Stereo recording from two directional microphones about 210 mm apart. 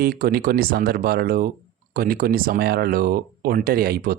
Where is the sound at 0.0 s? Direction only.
45° right (ahead or behind).